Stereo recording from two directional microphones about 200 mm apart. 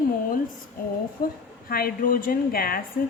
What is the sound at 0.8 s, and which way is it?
Speech, 45° left (ahead or behind).